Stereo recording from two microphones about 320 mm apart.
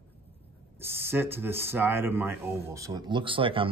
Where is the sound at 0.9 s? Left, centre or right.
Centre.